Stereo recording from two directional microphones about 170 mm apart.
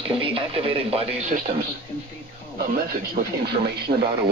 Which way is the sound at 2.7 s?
65° right (ahead or behind).